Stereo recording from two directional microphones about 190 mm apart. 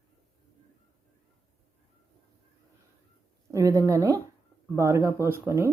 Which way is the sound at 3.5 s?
15° right (ahead or behind).